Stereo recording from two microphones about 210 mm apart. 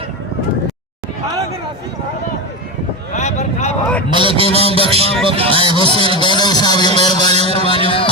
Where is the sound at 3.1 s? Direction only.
35° left (ahead or behind).